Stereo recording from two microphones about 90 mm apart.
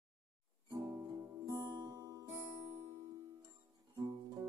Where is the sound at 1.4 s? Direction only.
60° right (ahead or behind).